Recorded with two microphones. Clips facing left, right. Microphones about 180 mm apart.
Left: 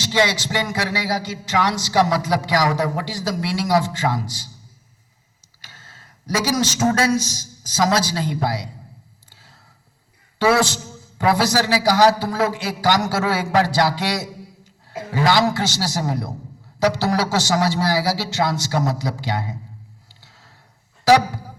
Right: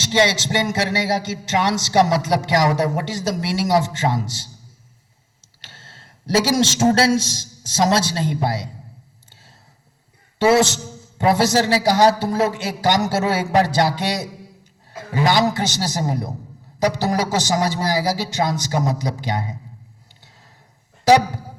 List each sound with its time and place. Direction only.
0.0 s speech: 25° right (ahead or behind)
6.2 s speech: 25° right (ahead or behind)
9.3 s a sound: 20° right (ahead or behind)
10.3 s a man's voice: 25° right (ahead or behind)